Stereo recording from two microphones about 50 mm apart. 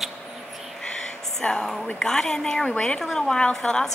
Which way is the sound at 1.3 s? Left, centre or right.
Centre.